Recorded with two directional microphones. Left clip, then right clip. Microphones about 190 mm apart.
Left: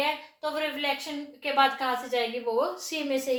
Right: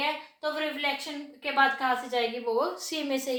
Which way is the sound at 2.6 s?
20° right (ahead or behind).